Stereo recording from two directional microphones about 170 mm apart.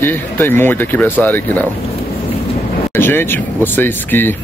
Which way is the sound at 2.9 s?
15° left (ahead or behind).